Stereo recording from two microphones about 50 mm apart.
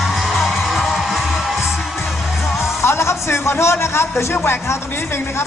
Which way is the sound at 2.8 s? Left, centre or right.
Left.